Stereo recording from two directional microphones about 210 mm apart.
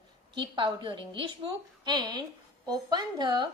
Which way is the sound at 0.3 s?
25° right (ahead or behind).